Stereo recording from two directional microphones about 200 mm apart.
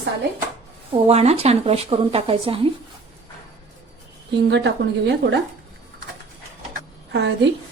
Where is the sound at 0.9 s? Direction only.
30° right (ahead or behind).